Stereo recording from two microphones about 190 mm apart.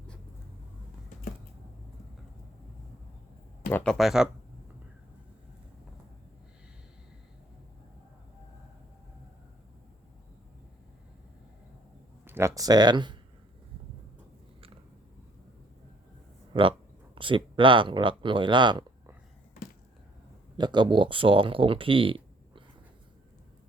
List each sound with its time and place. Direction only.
3.7 s speech: 5° left (ahead or behind)
12.2 s speech: 15° right (ahead or behind)
16.5 s speech: 25° right (ahead or behind)
20.6 s speech: 25° right (ahead or behind)